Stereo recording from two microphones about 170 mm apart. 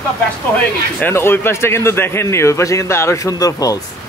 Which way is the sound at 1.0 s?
15° left (ahead or behind).